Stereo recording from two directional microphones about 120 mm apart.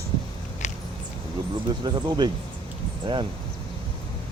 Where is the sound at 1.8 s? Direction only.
35° right (ahead or behind).